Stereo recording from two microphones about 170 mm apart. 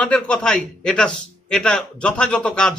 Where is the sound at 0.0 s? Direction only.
5° left (ahead or behind).